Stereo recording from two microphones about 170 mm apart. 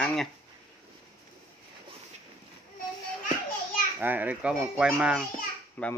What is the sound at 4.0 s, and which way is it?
Speech, 10° right (ahead or behind).